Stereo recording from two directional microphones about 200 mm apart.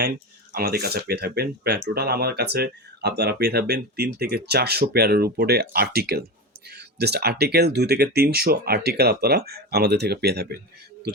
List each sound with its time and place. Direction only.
0.5 s speech: 50° right (ahead or behind)